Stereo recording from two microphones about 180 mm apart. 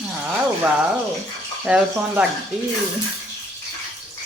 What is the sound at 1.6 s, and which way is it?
Speech, 5° right (ahead or behind).